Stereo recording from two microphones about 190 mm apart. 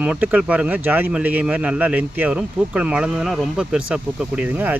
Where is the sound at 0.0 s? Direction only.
5° right (ahead or behind).